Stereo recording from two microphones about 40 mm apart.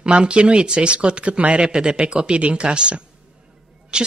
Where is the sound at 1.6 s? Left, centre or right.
Right.